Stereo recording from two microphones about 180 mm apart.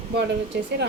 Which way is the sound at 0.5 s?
70° right (ahead or behind).